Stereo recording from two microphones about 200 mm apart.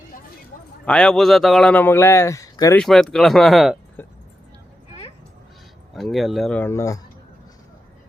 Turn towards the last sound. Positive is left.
turn(degrees=15)  # may be behind; listen again after turning